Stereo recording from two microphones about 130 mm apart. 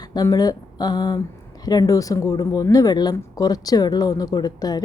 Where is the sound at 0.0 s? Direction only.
30° left (ahead or behind).